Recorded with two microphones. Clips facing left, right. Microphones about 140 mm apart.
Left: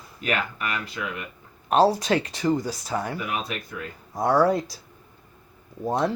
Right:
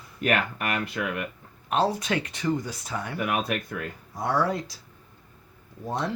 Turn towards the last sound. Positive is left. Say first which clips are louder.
# left 5 dB
turn(degrees=40)  # may be behind; listen again after turning